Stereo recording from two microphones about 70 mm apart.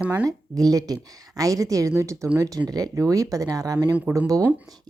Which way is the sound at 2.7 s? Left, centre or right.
Right.